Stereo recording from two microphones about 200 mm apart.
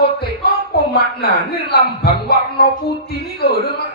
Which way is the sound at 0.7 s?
50° left (ahead or behind).